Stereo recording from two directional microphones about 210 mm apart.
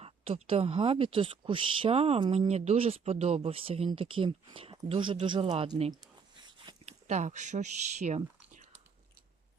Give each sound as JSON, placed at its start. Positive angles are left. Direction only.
{"t": 0.0, "sound": "a woman's voice", "side_deg": -30}